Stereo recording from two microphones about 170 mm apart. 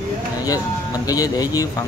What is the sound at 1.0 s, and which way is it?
Speech, 20° left (ahead or behind).